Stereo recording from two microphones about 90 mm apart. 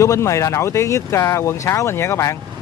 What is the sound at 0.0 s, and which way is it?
Speech, 35° left (ahead or behind).